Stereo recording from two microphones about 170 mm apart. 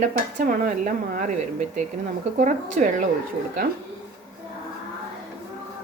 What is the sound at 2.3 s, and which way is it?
Speech, 45° right (ahead or behind).